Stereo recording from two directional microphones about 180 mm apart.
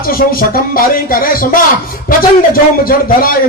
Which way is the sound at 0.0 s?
55° left (ahead or behind).